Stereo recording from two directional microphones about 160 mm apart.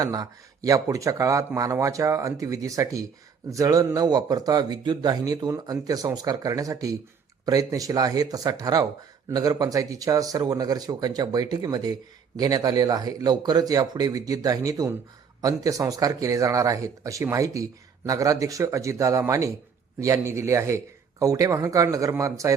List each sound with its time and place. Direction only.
0.0 s speech: 20° right (ahead or behind)